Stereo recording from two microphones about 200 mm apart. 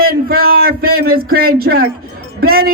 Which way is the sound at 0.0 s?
50° right (ahead or behind).